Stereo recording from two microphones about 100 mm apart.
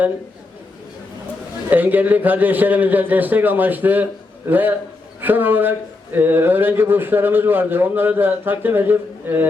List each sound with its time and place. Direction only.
1.7 s a man's voice: 20° right (ahead or behind)